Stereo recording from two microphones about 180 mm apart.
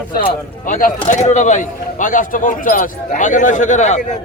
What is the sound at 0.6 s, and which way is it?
A man's voice, 45° left (ahead or behind).